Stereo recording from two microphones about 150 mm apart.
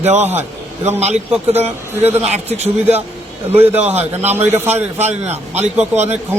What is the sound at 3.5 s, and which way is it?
A man's voice, 15° right (ahead or behind).